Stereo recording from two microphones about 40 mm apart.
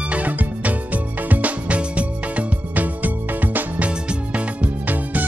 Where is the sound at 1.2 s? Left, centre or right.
Right.